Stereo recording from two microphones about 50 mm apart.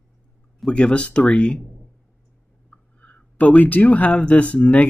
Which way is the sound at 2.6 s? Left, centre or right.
Left.